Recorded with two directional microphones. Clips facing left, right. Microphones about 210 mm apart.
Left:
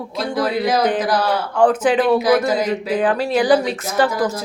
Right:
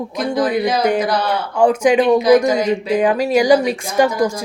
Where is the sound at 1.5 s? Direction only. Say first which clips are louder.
Right 2 dB; 10° right (ahead or behind).